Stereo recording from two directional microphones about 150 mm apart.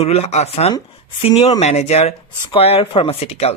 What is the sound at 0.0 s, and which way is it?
Speech, 45° left (ahead or behind).